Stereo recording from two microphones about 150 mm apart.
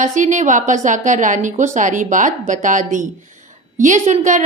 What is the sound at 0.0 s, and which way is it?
A woman's voice, 55° right (ahead or behind).